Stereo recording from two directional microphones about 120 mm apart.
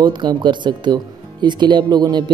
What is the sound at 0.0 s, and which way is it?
Speech, 40° right (ahead or behind).